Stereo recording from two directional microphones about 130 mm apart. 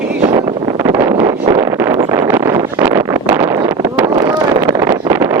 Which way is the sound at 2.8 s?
15° right (ahead or behind).